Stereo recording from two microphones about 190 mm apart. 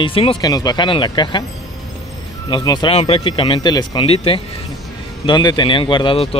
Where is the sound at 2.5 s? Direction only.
25° left (ahead or behind).